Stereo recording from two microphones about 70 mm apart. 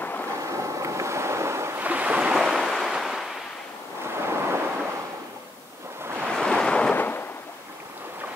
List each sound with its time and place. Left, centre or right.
0.0 s vehicle: left
0.4 s ocean: right
1.8 s waves: right
2.5 s waves: centre
4.0 s a sound: right
6.2 s waves: centre
7.0 s a sound: left